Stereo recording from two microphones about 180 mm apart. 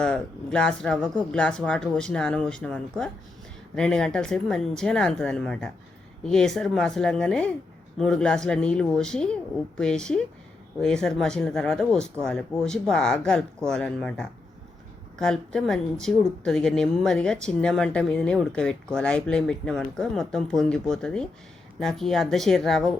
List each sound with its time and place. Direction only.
0.0 s a woman's voice: 5° left (ahead or behind)